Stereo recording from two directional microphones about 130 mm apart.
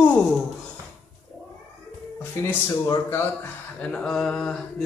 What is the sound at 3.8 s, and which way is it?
Mantra, 5° left (ahead or behind).